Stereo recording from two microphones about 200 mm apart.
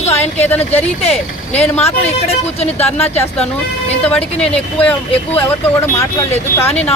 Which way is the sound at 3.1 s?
10° left (ahead or behind).